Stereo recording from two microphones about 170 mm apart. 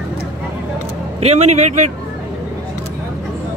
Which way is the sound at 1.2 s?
40° right (ahead or behind).